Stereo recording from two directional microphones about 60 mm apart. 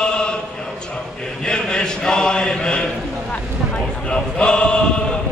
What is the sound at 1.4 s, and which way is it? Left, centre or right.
Chant, centre.